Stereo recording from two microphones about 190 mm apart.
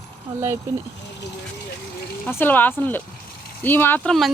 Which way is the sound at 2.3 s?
10° left (ahead or behind).